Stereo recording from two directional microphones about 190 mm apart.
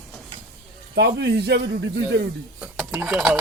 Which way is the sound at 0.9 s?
60° right (ahead or behind).